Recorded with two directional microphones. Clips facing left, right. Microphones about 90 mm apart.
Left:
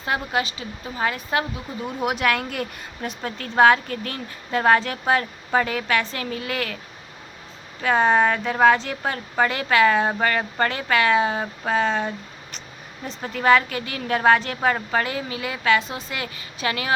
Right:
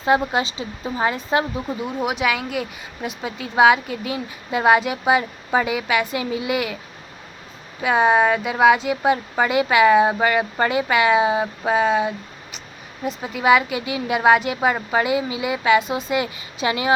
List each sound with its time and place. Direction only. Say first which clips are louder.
0.0 s speech: right 6 dB; 20° right (ahead or behind)
1.8 s speech: even; centre (ahead or behind)
7.8 s speech: right 2 dB; 10° right (ahead or behind)